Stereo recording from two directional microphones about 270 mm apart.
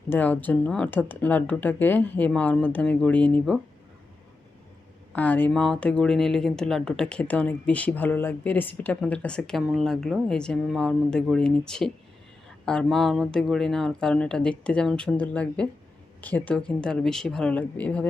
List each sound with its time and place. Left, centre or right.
0.1 s speech: centre
5.1 s speech: centre